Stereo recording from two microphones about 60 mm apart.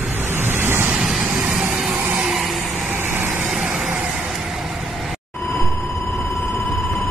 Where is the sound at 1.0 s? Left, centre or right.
Centre.